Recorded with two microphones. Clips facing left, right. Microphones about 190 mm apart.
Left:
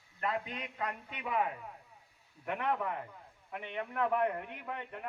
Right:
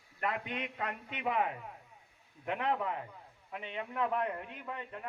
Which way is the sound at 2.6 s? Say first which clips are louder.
Even; 55° left (ahead or behind).